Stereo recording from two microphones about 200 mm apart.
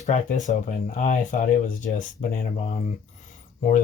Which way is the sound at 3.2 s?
40° left (ahead or behind).